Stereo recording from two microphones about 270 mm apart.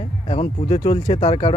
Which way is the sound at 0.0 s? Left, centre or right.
Left.